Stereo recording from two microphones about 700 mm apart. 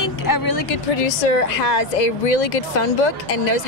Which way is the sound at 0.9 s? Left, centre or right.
Left.